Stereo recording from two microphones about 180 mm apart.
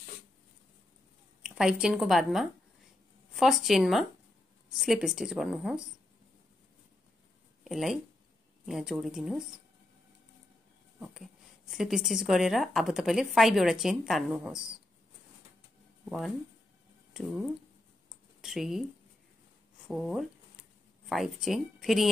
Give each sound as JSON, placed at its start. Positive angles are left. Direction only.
{"t": 1.4, "sound": "a woman's voice", "side_deg": -5}
{"t": 7.6, "sound": "a woman's voice", "side_deg": 0}
{"t": 11.7, "sound": "a woman's voice", "side_deg": 0}
{"t": 17.1, "sound": "speech", "side_deg": 0}
{"t": 19.9, "sound": "a woman's voice", "side_deg": 0}